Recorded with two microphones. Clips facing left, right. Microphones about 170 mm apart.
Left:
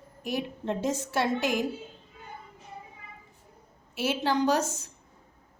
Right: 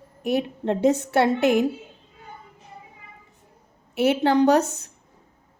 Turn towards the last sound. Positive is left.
turn(degrees=-60)  # may be behind; listen again after turning